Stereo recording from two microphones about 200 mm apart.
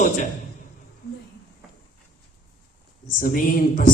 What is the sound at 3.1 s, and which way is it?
Speech, 45° left (ahead or behind).